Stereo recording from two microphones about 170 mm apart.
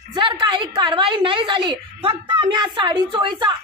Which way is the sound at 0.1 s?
30° right (ahead or behind).